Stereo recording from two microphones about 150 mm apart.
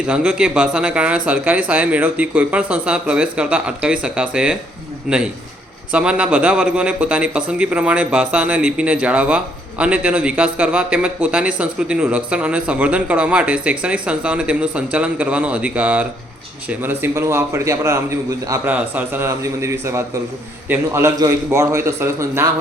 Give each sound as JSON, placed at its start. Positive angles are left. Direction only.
{"t": 0.0, "sound": "a man's voice", "side_deg": -10}